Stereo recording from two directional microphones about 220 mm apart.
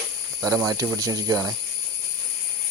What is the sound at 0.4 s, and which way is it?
Speech, 15° right (ahead or behind).